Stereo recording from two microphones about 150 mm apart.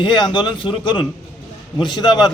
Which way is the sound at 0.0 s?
30° left (ahead or behind).